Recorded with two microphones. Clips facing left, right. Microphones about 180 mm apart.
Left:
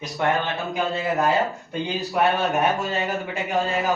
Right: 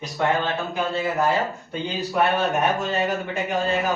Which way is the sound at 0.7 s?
15° left (ahead or behind).